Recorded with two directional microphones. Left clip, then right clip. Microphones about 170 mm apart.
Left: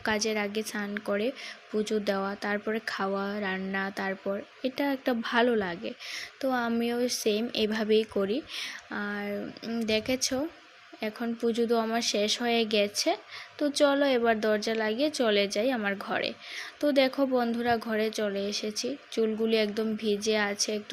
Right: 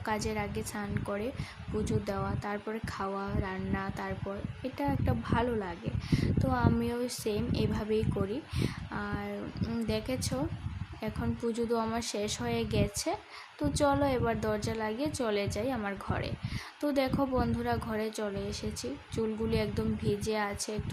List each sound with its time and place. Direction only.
0.0 s speech: 15° left (ahead or behind)
9.6 s speech: 5° left (ahead or behind)